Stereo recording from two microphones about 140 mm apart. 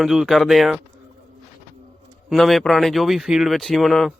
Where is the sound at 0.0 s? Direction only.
Centre (ahead or behind).